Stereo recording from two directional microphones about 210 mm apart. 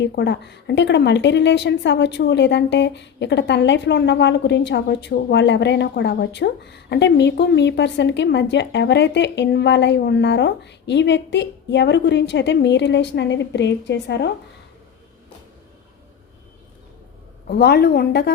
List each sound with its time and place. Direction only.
0.0 s a woman's voice: 55° left (ahead or behind)
17.4 s a woman's voice: 50° left (ahead or behind)